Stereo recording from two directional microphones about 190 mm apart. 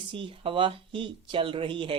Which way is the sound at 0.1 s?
25° right (ahead or behind).